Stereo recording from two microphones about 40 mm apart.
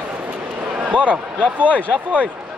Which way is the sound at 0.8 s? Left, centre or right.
Right.